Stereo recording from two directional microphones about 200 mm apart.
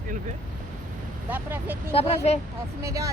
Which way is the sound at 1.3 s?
10° right (ahead or behind).